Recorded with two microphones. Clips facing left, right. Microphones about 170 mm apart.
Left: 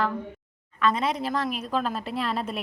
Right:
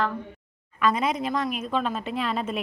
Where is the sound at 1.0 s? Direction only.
35° left (ahead or behind).